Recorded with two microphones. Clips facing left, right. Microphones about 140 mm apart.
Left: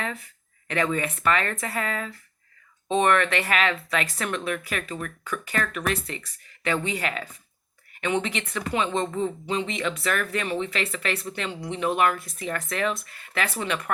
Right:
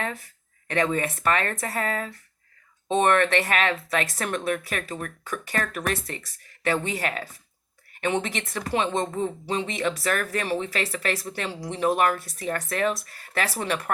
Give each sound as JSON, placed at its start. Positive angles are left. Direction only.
{"t": 0.0, "sound": "speech", "side_deg": -35}